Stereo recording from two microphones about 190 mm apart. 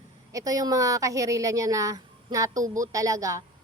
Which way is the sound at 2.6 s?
45° right (ahead or behind).